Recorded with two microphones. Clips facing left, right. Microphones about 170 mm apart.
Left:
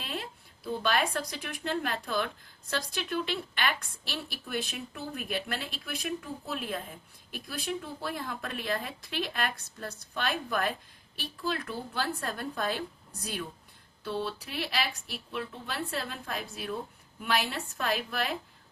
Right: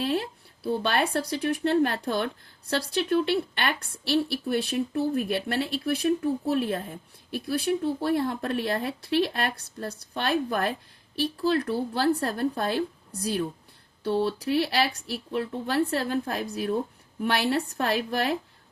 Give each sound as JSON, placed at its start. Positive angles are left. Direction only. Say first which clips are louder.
{"t": 0.0, "sound": "speech", "louder": "right 11 dB", "side_deg": -35}
{"t": 14.0, "sound": "speech", "louder": "right 8 dB", "side_deg": -40}